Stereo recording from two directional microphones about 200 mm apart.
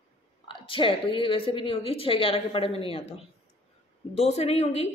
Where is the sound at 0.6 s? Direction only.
25° left (ahead or behind).